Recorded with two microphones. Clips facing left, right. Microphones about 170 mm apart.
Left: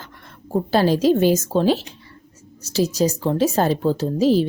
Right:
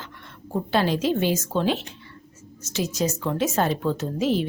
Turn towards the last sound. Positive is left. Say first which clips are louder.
# left 6 dB
turn(degrees=35)  # may be behind; listen again after turning